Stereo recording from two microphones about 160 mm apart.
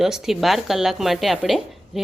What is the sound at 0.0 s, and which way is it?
A woman's voice, centre (ahead or behind).